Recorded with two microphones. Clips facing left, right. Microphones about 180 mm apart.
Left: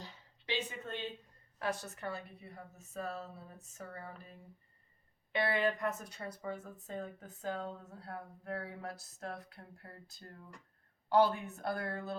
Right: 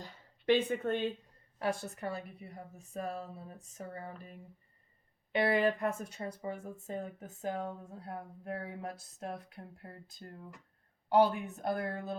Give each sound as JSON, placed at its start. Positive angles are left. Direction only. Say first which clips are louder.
{"t": 0.0, "sound": "a sound", "louder": "right 12 dB", "side_deg": -55}
{"t": 1.5, "sound": "speech", "louder": "right 3 dB", "side_deg": -30}
{"t": 2.5, "sound": "speech", "louder": "right 3 dB", "side_deg": -15}
{"t": 5.3, "sound": "speech", "louder": "right 4 dB", "side_deg": -35}
{"t": 6.5, "sound": "speech", "louder": "right 3 dB", "side_deg": -15}